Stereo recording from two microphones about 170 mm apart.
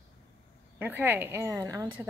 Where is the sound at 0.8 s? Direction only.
10° right (ahead or behind).